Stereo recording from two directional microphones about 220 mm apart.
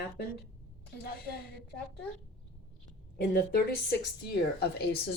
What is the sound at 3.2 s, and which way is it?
Speech, 45° left (ahead or behind).